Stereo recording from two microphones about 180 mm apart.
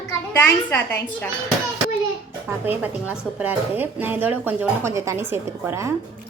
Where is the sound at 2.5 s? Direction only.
10° right (ahead or behind).